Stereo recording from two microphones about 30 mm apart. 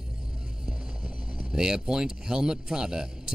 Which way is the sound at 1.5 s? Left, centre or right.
Right.